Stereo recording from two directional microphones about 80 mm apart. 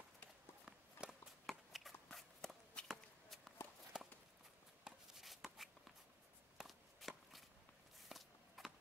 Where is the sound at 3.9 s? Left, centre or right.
Centre.